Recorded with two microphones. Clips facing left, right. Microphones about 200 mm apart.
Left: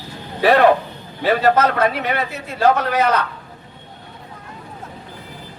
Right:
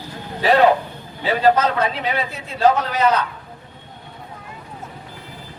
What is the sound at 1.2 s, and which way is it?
A man's voice, 55° left (ahead or behind).